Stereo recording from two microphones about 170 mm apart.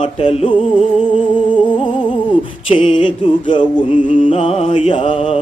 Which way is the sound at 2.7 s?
30° left (ahead or behind).